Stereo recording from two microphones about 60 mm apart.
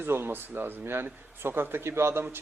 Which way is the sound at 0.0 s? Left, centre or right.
Right.